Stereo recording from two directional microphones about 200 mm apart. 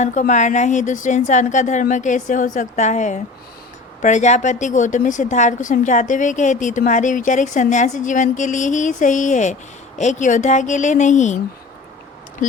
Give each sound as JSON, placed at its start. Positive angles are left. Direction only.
{"t": 0.0, "sound": "a woman's voice", "side_deg": 40}
{"t": 12.4, "sound": "a woman's voice", "side_deg": 40}